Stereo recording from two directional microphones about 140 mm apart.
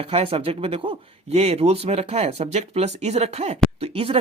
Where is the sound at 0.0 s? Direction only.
45° right (ahead or behind).